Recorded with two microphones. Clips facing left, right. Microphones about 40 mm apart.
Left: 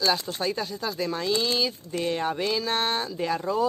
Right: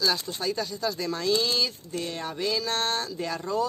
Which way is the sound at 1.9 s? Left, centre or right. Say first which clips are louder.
Left 6 dB; left.